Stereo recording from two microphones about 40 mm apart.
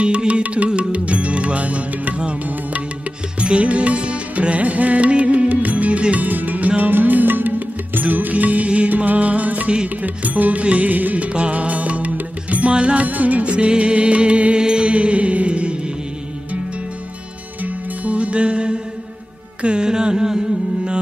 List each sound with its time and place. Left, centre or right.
0.0 s music: right
6.2 s music: right
13.0 s music: right
17.6 s music: right
19.6 s carnatic music: right